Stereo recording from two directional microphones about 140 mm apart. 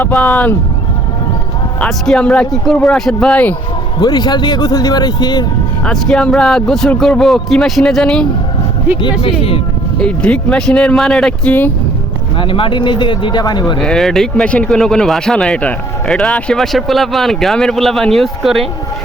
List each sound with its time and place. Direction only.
0.0 s speech: 5° left (ahead or behind)
1.8 s speech: 5° left (ahead or behind)
4.0 s speech: 30° left (ahead or behind)
5.8 s speech: 5° left (ahead or behind)
9.2 s speech: 40° left (ahead or behind)
10.0 s speech: 5° left (ahead or behind)
12.4 s speech: 40° left (ahead or behind)
13.8 s speech: 5° left (ahead or behind)